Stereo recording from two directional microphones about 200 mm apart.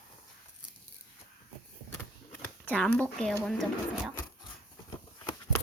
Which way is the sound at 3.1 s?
Centre (ahead or behind).